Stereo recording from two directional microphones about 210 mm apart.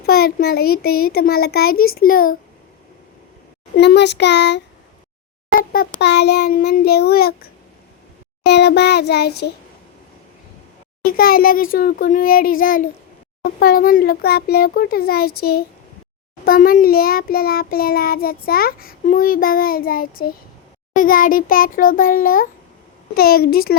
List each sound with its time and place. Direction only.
0.0 s child singing: 50° left (ahead or behind)
3.8 s child singing: 55° left (ahead or behind)
6.0 s child singing: 50° left (ahead or behind)
11.0 s child singing: 45° left (ahead or behind)
20.9 s a child's voice: 40° left (ahead or behind)
23.1 s child singing: 45° left (ahead or behind)